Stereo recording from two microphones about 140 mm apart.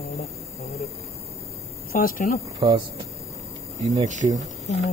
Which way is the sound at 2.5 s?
35° right (ahead or behind).